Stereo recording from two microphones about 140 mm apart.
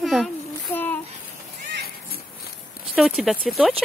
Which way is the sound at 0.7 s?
15° left (ahead or behind).